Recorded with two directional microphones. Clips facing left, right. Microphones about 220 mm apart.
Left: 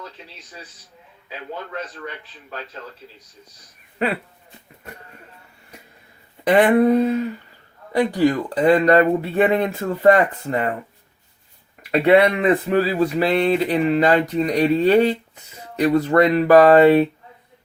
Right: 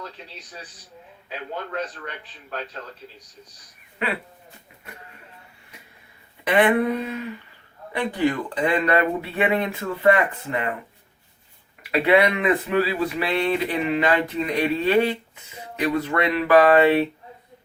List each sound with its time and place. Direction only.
3.9 s speech: 40° left (ahead or behind)
6.4 s speech: 40° left (ahead or behind)
11.8 s speech: 40° left (ahead or behind)